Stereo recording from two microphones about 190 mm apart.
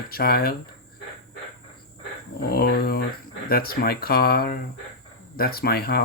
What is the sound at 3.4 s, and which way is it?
Speech, 55° left (ahead or behind).